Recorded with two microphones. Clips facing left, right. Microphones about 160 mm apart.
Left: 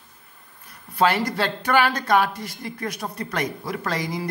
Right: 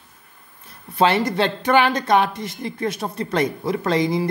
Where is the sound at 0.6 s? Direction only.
25° right (ahead or behind).